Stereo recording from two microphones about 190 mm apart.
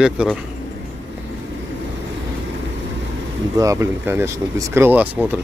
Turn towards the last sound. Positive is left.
turn(degrees=-10)  # may be behind; listen again after turning